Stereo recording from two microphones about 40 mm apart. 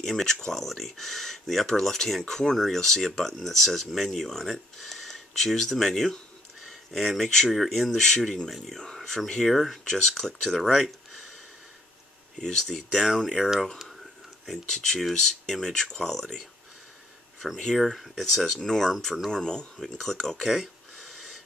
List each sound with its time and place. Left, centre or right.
0.0 s speech: centre
8.0 s speech: centre
8.5 s speech: centre
8.7 s speech: centre
10.7 s a sound: centre
12.4 s speech: centre
14.7 s speech: centre
17.7 s speech: centre
20.4 s a sound: centre